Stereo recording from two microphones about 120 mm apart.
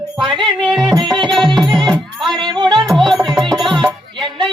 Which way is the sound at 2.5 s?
40° right (ahead or behind).